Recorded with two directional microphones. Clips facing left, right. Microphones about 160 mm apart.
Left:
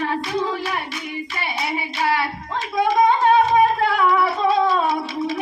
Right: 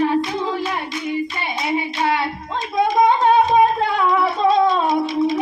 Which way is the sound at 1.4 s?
20° right (ahead or behind).